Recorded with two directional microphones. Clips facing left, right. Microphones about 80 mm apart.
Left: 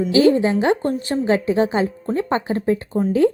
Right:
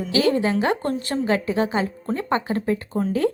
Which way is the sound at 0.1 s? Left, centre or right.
Left.